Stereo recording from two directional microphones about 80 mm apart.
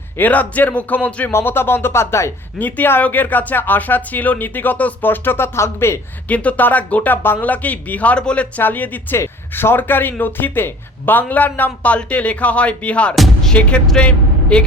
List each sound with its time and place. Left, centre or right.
0.2 s speech: centre
1.3 s speech: left
2.6 s speech: left
6.2 s speech: centre
13.1 s music: centre
13.5 s speech: centre